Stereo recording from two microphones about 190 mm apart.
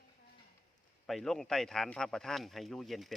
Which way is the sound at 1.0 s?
Centre (ahead or behind).